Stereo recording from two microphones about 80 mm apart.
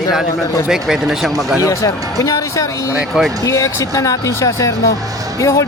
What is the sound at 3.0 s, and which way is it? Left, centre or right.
Speech, centre.